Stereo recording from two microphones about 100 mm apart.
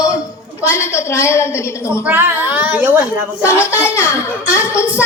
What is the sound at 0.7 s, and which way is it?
A woman's voice, 25° left (ahead or behind).